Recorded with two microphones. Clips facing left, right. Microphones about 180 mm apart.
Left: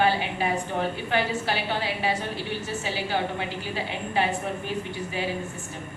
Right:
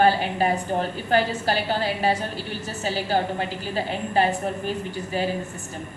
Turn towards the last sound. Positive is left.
turn(degrees=-40)  # may be behind; listen again after turning